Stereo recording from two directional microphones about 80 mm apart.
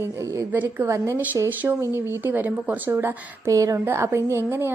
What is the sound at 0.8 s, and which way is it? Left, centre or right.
Speech, right.